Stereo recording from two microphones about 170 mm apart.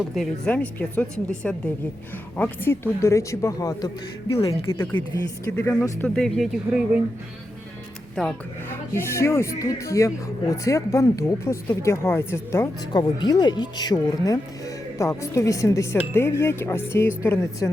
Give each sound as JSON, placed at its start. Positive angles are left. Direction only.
{"t": 0.0, "sound": "speech", "side_deg": 0}
{"t": 8.1, "sound": "speech", "side_deg": 5}
{"t": 8.9, "sound": "speech", "side_deg": 15}